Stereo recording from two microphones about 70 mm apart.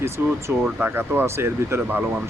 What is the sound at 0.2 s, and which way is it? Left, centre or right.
Speech, right.